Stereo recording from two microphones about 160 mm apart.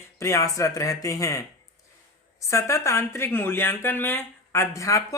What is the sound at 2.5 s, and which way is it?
Speech, 20° left (ahead or behind).